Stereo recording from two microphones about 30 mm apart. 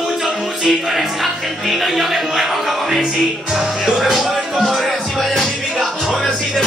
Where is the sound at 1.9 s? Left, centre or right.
Centre.